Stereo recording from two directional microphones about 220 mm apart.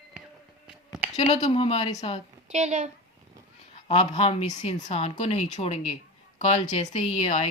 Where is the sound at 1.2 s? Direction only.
30° left (ahead or behind).